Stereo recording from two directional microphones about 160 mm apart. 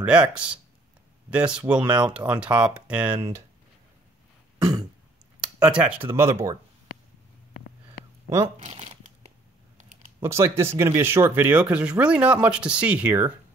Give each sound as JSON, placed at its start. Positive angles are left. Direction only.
{"t": 0.0, "sound": "speech", "side_deg": -5}
{"t": 5.4, "sound": "speech", "side_deg": -5}
{"t": 8.5, "sound": "crumpling", "side_deg": -45}
{"t": 10.2, "sound": "speech", "side_deg": -15}